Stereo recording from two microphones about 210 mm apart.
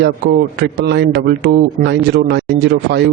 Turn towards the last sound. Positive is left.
turn(degrees=-55)  # may be behind; listen again after turning